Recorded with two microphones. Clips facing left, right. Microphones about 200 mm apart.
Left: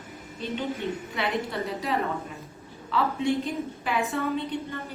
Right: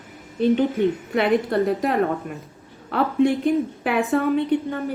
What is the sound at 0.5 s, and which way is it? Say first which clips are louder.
A woman's voice: right 8 dB; 55° right (ahead or behind).